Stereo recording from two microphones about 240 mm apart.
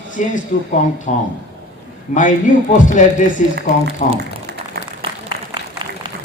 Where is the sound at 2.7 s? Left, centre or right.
Left.